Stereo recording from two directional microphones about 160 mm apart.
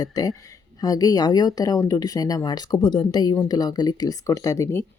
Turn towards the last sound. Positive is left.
turn(degrees=20)  # may be behind; listen again after turning